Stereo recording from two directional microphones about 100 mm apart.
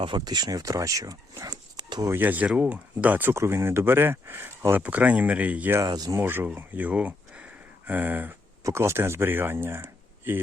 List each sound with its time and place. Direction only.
0.0 s speech: 50° right (ahead or behind)
2.0 s speech: 20° right (ahead or behind)
5.8 s speech: 40° right (ahead or behind)
6.1 s speech: 20° right (ahead or behind)
8.6 s speech: 25° right (ahead or behind)